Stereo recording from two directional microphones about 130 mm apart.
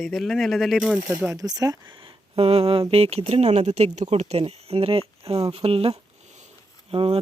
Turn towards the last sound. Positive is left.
turn(degrees=-45)  # may be behind; listen again after turning